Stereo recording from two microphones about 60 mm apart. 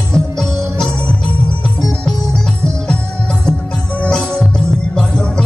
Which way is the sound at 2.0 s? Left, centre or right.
Centre.